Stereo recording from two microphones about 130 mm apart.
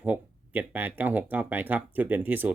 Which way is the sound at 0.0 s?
10° right (ahead or behind).